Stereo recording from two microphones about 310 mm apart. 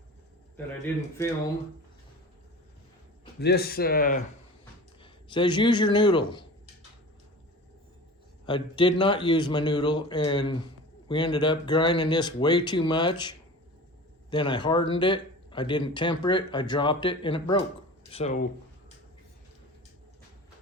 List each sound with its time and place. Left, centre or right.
0.9 s speech: centre
3.4 s speech: left
5.3 s speech: centre
8.4 s speech: centre